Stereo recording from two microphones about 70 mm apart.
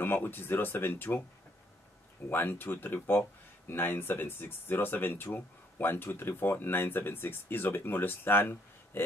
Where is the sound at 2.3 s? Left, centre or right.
Left.